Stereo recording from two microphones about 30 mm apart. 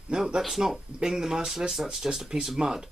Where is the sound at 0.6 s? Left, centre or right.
Right.